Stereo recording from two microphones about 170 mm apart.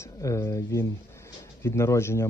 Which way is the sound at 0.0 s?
20° left (ahead or behind).